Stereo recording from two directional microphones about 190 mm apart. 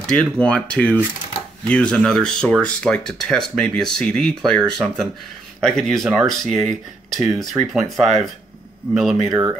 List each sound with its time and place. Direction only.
0.0 s speech: 5° left (ahead or behind)